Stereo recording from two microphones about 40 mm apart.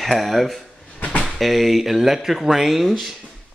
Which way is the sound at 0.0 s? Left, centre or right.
Centre.